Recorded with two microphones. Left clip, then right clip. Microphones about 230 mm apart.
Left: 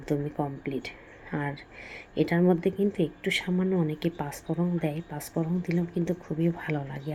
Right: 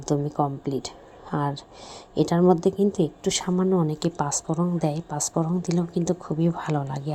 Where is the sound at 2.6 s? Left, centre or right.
Right.